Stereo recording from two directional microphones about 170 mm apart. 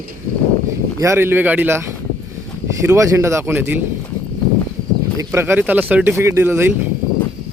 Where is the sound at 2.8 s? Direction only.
15° right (ahead or behind).